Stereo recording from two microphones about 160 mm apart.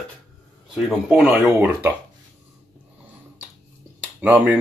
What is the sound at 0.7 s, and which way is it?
Speech, 5° right (ahead or behind).